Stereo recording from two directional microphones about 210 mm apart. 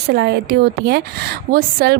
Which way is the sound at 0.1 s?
55° right (ahead or behind).